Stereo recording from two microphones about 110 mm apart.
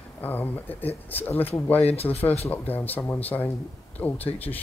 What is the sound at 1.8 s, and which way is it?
Speech, 65° left (ahead or behind).